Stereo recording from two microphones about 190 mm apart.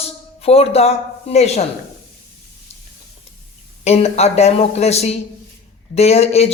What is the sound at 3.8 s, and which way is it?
A man's voice, 35° left (ahead or behind).